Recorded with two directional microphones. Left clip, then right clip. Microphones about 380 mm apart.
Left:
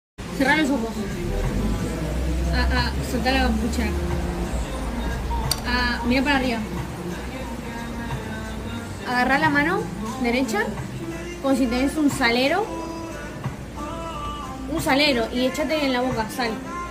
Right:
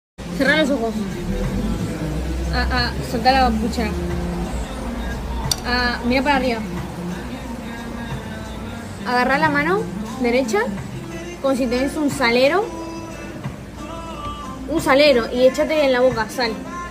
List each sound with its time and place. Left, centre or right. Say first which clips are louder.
0.4 s a woman's voice: right 3 dB; centre
2.5 s a woman's voice: right 4 dB; centre
5.7 s a woman's voice: right 3 dB; centre
9.1 s a woman's voice: right 2 dB; centre
14.9 s a woman's voice: right 6 dB; centre